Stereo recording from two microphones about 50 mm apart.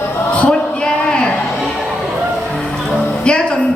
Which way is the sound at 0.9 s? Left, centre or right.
Centre.